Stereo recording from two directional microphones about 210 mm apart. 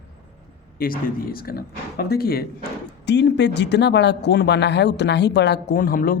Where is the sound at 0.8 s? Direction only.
45° left (ahead or behind).